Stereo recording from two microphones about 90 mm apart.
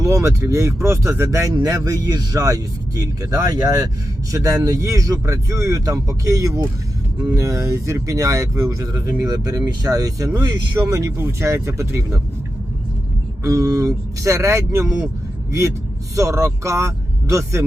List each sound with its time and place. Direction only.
0.0 s speech: 35° right (ahead or behind)
13.4 s speech: 40° right (ahead or behind)
16.1 s speech: 35° right (ahead or behind)